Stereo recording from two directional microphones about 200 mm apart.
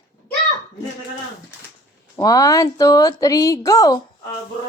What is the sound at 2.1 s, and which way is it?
A woman's voice, 20° left (ahead or behind).